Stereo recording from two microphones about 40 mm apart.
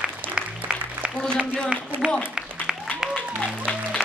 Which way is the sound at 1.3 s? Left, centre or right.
Right.